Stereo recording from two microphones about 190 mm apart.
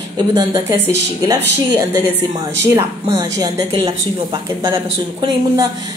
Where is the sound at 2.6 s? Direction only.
15° right (ahead or behind).